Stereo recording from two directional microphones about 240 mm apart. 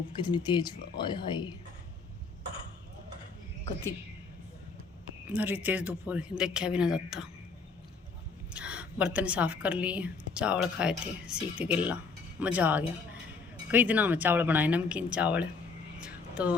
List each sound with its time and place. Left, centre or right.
0.2 s a woman's voice: centre
5.3 s a woman's voice: centre
8.5 s a woman's voice: centre
16.0 s vehicle: centre